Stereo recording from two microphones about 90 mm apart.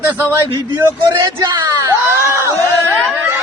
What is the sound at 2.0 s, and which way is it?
Speech, 30° right (ahead or behind).